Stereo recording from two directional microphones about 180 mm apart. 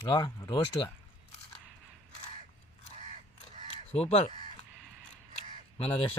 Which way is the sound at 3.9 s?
40° left (ahead or behind).